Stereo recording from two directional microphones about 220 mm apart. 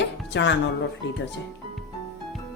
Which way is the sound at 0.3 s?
55° left (ahead or behind).